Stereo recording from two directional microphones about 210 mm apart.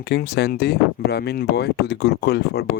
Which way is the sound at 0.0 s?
50° left (ahead or behind).